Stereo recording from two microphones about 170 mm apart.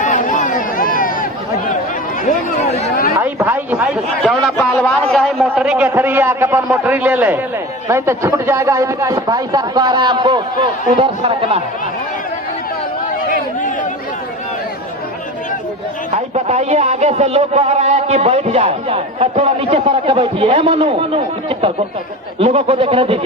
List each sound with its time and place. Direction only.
0.0 s chatter: 50° left (ahead or behind)
2.6 s chatter: 40° left (ahead or behind)
3.2 s a sound: 15° right (ahead or behind)
4.5 s a man's voice: 10° left (ahead or behind); by 11.6 s 35° right (ahead or behind)
16.1 s a man's voice: 40° right (ahead or behind)
22.4 s a man's voice: 35° right (ahead or behind)